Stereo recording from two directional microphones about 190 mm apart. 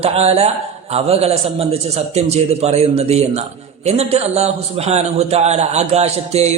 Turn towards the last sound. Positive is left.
turn(degrees=-35)  # may be behind; listen again after turning